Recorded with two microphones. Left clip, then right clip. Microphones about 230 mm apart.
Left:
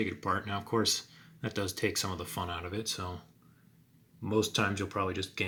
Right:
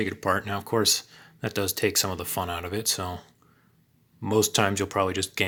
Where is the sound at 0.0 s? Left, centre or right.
Right.